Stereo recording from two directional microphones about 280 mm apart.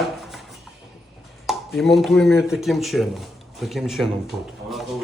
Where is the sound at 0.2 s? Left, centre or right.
Centre.